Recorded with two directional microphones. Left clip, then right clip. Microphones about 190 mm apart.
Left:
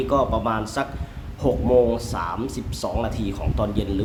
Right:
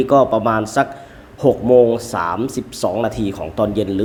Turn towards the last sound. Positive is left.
turn(degrees=-25)  # may be behind; listen again after turning